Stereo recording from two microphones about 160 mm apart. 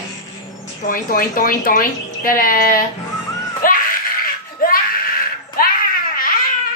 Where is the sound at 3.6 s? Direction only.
60° left (ahead or behind).